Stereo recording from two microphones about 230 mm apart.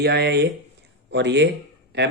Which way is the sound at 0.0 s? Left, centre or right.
Right.